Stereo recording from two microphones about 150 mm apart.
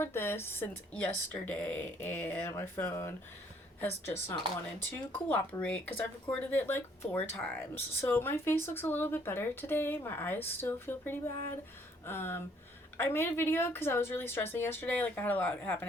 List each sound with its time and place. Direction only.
0.0 s speech: 15° left (ahead or behind)